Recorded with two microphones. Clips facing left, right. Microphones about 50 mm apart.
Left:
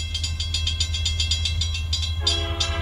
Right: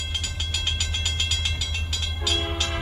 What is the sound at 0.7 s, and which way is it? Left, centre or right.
Train, right.